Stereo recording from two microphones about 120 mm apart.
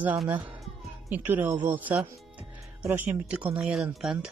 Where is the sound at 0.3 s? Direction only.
15° right (ahead or behind).